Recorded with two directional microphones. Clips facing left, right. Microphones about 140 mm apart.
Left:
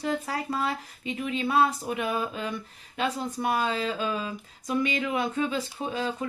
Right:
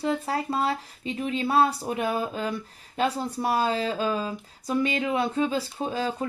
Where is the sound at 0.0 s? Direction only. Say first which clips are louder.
Right 3 dB; 30° right (ahead or behind).